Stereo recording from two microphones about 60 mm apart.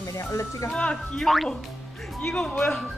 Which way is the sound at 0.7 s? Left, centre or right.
Centre.